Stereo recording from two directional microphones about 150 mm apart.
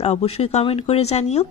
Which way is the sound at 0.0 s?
45° left (ahead or behind).